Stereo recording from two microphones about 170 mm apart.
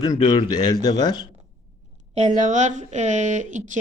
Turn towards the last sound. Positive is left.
turn(degrees=-45)  # may be behind; listen again after turning